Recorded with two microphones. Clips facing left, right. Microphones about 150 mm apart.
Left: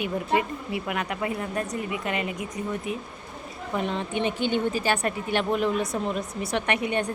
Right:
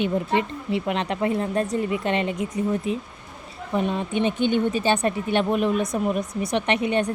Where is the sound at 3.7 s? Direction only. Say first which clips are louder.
Right 4 dB; 15° right (ahead or behind).